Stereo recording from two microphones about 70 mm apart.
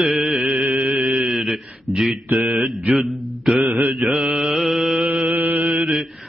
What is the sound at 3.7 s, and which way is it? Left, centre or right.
Mantra, right.